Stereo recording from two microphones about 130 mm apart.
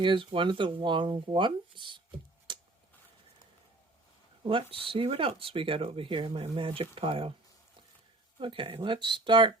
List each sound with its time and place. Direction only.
0.0 s speech: 40° right (ahead or behind)
2.5 s a sound: 35° right (ahead or behind)
4.4 s speech: 45° right (ahead or behind)
8.4 s speech: 40° right (ahead or behind)